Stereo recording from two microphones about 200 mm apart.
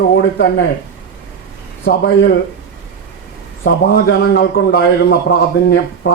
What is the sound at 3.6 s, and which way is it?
A man's voice, 55° left (ahead or behind).